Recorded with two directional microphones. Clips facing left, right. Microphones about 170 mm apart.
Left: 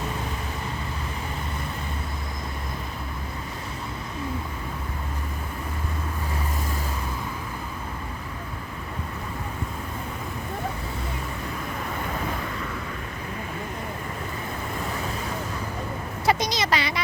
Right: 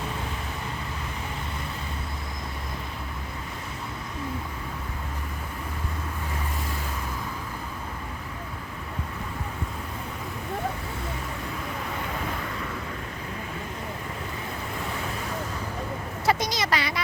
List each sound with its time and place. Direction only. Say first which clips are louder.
16.2 s speech: left 2 dB; 15° left (ahead or behind)